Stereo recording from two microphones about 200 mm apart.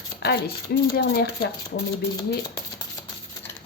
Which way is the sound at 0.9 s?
45° left (ahead or behind).